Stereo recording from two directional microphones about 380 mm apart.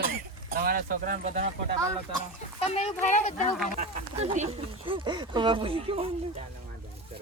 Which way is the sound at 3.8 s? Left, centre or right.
Centre.